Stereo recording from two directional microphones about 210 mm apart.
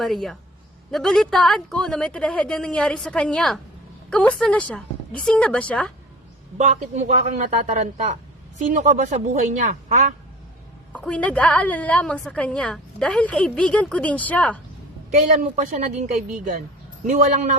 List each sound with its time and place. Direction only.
0.0 s a woman's voice: centre (ahead or behind)
6.6 s speech: 35° right (ahead or behind)
10.9 s a woman's voice: 5° left (ahead or behind)
15.4 s speech: 40° right (ahead or behind)